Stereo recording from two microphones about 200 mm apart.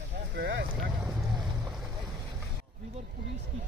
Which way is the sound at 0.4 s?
65° right (ahead or behind).